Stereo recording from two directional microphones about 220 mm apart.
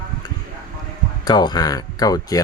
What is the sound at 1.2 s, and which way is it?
Speech, 20° left (ahead or behind).